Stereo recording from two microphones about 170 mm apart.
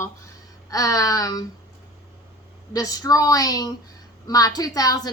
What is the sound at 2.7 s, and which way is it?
A woman's voice, 20° left (ahead or behind).